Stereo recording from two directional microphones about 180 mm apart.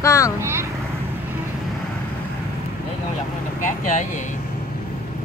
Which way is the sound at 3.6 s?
45° left (ahead or behind).